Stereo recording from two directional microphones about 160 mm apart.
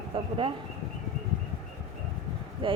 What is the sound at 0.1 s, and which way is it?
Speech, 35° right (ahead or behind).